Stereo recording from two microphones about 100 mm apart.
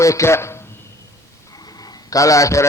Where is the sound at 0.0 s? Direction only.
30° left (ahead or behind).